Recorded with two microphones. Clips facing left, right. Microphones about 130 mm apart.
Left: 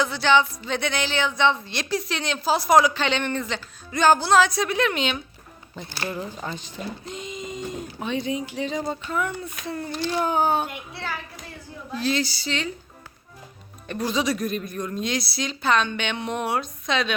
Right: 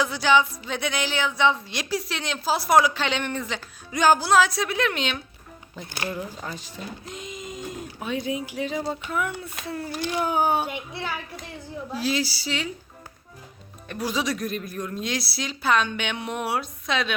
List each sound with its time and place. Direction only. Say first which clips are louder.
0.0 s speech: left 1 dB; 10° right (ahead or behind)
6.4 s speech: left 3 dB; 5° right (ahead or behind)
13.8 s speech: left 2 dB; 5° right (ahead or behind)